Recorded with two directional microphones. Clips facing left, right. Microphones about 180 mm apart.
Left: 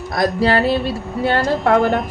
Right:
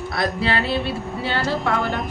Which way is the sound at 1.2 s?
55° left (ahead or behind).